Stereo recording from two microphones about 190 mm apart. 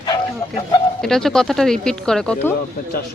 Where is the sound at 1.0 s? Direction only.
Centre (ahead or behind).